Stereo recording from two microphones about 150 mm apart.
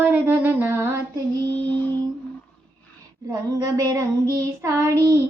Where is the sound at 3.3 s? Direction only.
20° right (ahead or behind).